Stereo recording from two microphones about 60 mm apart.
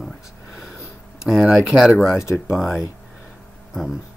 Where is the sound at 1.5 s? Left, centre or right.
Centre.